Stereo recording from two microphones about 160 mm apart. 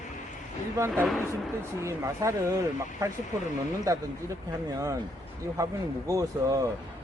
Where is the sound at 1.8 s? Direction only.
20° right (ahead or behind).